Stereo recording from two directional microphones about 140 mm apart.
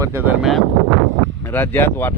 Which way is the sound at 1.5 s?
15° left (ahead or behind).